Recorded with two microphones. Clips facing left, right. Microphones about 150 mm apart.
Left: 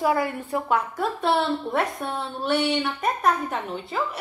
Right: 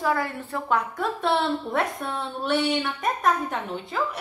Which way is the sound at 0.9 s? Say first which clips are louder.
Left 1 dB; 5° left (ahead or behind).